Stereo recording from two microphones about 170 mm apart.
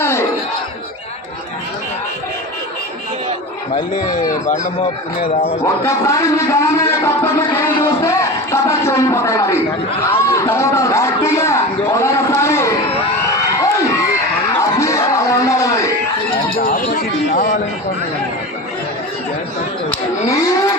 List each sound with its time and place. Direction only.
0.0 s crowd: 15° left (ahead or behind)
4.1 s speech: 50° left (ahead or behind)
5.2 s speech: 35° left (ahead or behind)
5.6 s speech: 20° left (ahead or behind)
14.6 s music: 20° left (ahead or behind)
16.6 s a man's voice: 55° left (ahead or behind)
20.3 s speech: 20° left (ahead or behind)